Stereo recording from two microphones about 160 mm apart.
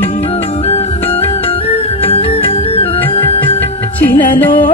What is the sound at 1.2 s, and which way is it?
Music, 40° left (ahead or behind).